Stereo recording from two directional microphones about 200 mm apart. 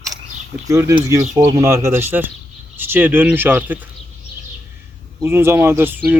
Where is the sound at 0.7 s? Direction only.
15° right (ahead or behind).